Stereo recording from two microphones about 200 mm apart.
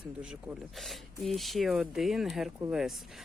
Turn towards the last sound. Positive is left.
turn(degrees=0)  # may be behind; listen again after turning